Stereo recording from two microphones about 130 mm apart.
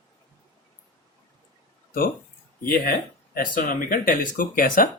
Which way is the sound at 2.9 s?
90° left.